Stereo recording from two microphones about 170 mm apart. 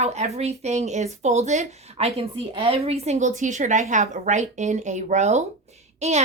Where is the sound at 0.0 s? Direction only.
40° right (ahead or behind).